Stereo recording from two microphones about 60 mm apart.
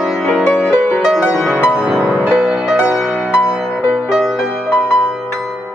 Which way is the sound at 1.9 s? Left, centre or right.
Centre.